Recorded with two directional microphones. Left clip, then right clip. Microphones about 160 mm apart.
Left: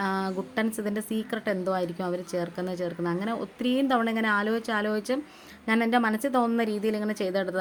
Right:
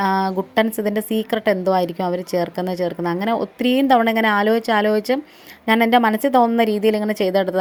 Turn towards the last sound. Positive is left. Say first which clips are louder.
# right 10 dB
turn(degrees=-35)  # may be behind; listen again after turning